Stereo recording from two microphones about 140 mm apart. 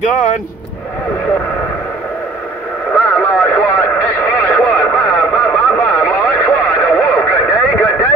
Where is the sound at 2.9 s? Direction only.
15° left (ahead or behind).